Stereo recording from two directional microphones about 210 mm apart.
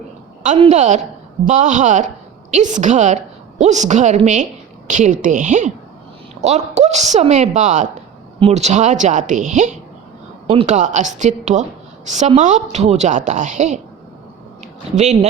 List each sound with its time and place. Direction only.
0.4 s a woman's voice: 35° right (ahead or behind)